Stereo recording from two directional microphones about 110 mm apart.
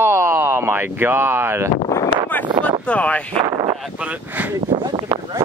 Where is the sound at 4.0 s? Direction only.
15° right (ahead or behind).